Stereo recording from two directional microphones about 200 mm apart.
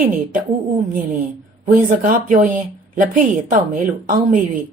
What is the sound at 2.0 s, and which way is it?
A woman's voice, 40° right (ahead or behind).